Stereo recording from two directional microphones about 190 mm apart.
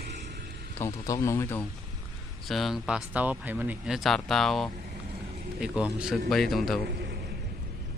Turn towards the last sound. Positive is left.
turn(degrees=-60)  # may be behind; listen again after turning